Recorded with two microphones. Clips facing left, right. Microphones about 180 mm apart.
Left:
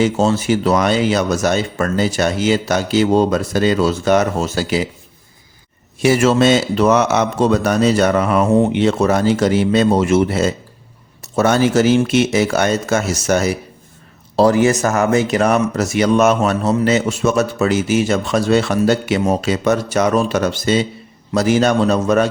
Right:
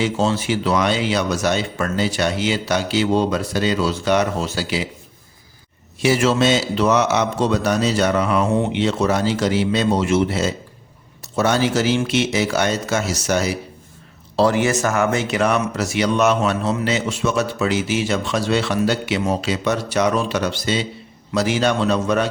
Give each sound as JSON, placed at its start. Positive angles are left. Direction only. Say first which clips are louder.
{"t": 0.0, "sound": "speech", "louder": "left 4 dB", "side_deg": 45}
{"t": 6.0, "sound": "speech", "louder": "left 4 dB", "side_deg": 50}